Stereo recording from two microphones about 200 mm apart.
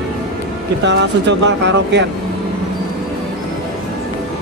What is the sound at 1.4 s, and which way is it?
Speech, 60° right (ahead or behind).